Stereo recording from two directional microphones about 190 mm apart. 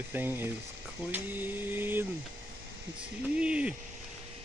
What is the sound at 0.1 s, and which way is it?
Speech, 10° right (ahead or behind).